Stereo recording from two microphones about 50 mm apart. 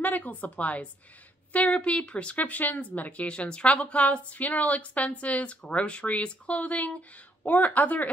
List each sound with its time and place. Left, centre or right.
0.0 s a woman's voice: left
2.3 s a woman's voice: left